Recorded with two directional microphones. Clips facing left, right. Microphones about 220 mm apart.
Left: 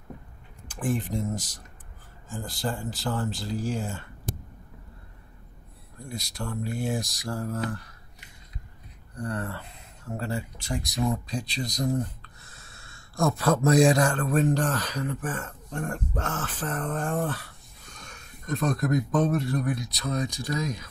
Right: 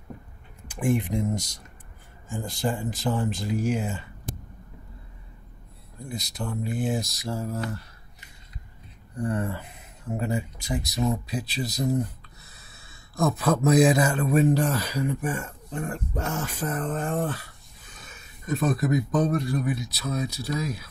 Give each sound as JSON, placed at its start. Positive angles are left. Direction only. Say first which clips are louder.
{"t": 0.7, "sound": "speech", "louder": "right 4 dB", "side_deg": -10}
{"t": 1.3, "sound": "speech", "louder": "right 3 dB", "side_deg": 5}
{"t": 2.8, "sound": "speech", "louder": "right 3 dB", "side_deg": -20}
{"t": 6.0, "sound": "speech", "louder": "right 2 dB", "side_deg": 0}
{"t": 7.0, "sound": "mantra", "louder": "right 2 dB", "side_deg": 15}
{"t": 7.2, "sound": "speech", "louder": "even", "side_deg": 0}
{"t": 9.1, "sound": "speech", "louder": "right 4 dB", "side_deg": -20}
{"t": 11.1, "sound": "a sound", "louder": "right 1 dB", "side_deg": -5}
{"t": 13.5, "sound": "speech", "louder": "right 1 dB", "side_deg": -5}